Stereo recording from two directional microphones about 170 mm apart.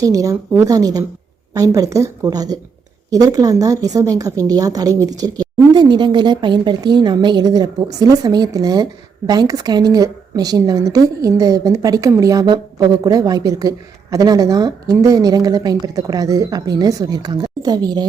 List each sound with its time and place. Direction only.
0.0 s a woman's voice: 20° right (ahead or behind)